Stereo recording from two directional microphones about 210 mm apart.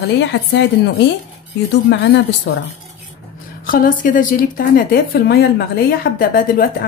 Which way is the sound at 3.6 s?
40° left (ahead or behind).